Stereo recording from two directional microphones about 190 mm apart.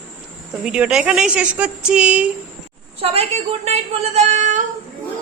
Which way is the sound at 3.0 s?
30° right (ahead or behind).